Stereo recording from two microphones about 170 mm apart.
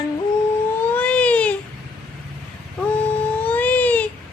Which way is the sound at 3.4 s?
10° left (ahead or behind).